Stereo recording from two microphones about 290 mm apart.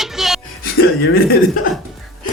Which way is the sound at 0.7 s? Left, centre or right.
Left.